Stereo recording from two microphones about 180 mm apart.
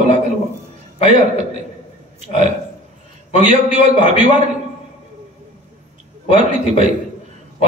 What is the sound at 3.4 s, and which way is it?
Speech, 45° right (ahead or behind).